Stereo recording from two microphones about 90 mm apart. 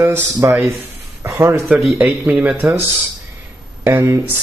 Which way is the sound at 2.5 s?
25° right (ahead or behind).